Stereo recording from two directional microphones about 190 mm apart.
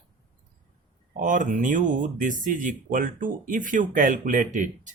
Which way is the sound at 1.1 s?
40° right (ahead or behind).